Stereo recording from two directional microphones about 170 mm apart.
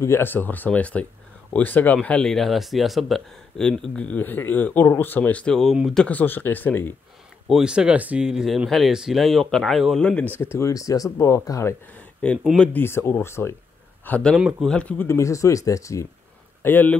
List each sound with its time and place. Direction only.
0.0 s speech: 15° left (ahead or behind)
7.4 s speech: 5° right (ahead or behind)
14.3 s speech: centre (ahead or behind)